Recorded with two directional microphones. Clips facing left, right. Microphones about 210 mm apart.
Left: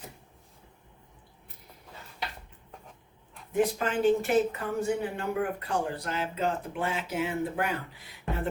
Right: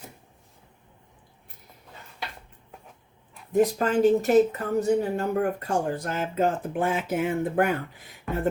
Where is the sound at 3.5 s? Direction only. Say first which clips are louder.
Right 5 dB; 40° right (ahead or behind).